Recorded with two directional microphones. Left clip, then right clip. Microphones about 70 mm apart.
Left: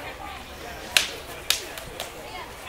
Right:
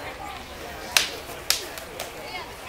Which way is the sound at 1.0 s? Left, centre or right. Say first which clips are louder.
Even; centre.